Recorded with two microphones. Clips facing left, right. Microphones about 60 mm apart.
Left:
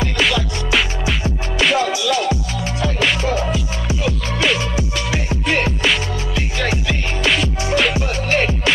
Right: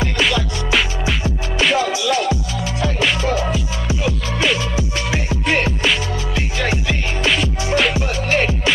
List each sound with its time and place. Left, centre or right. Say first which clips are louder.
0.2 s music: left 1 dB; centre
1.9 s music: even; right
5.3 s music: even; centre
7.2 s music: left 1 dB; centre